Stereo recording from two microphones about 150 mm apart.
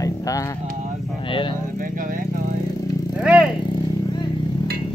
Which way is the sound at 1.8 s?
70° right (ahead or behind).